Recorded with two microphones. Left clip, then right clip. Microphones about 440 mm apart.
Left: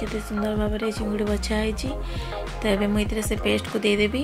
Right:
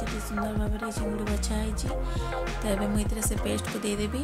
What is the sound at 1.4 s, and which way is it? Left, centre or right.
A woman's voice, right.